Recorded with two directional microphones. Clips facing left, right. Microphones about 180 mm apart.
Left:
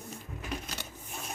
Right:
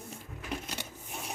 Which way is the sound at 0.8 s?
15° right (ahead or behind).